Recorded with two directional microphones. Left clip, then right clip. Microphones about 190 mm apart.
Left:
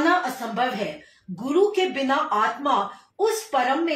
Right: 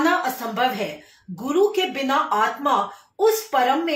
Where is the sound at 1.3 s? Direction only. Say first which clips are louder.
Right 1 dB; 20° right (ahead or behind).